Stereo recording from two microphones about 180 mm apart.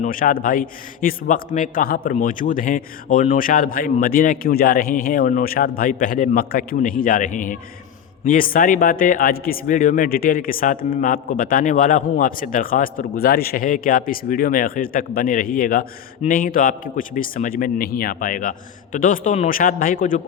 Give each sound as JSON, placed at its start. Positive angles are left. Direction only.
{"t": 0.0, "sound": "speech", "side_deg": 50}